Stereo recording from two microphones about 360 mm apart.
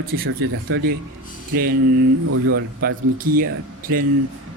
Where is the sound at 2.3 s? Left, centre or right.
Right.